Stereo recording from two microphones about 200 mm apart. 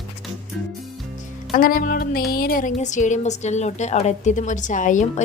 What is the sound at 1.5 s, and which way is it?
Music, 45° left (ahead or behind).